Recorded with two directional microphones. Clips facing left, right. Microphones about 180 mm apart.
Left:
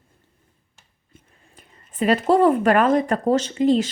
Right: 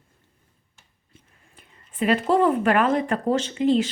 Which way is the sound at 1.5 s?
40° left (ahead or behind).